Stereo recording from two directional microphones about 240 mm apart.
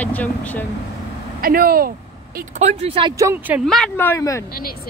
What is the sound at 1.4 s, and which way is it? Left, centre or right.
Speech, right.